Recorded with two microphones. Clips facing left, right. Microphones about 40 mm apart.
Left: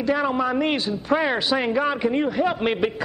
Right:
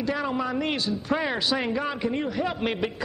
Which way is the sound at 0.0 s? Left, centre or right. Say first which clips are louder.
Left 5 dB; centre.